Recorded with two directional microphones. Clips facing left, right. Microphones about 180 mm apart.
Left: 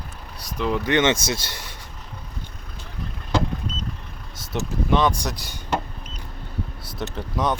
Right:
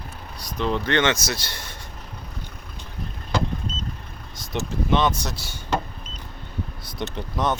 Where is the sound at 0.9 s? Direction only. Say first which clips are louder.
Left 4 dB; 20° left (ahead or behind).